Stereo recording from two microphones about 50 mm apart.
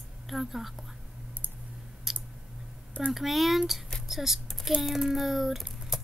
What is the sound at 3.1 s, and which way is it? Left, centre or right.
Speech, centre.